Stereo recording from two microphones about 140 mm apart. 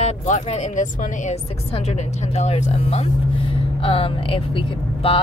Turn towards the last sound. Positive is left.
turn(degrees=40)  # may be behind; listen again after turning